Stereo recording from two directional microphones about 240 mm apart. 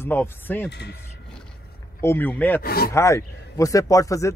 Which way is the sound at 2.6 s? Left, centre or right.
Left.